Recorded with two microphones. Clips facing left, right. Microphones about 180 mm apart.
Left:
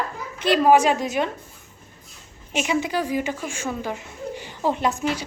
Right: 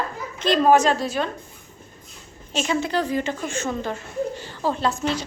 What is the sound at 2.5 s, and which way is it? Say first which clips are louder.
Speech: even; 15° left (ahead or behind).